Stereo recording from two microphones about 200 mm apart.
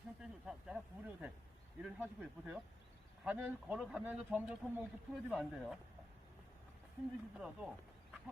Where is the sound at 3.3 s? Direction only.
5° right (ahead or behind).